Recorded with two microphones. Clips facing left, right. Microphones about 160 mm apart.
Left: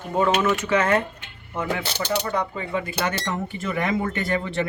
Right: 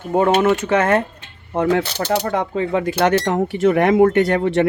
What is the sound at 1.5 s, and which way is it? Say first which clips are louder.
Speech: right 9 dB; 60° right (ahead or behind).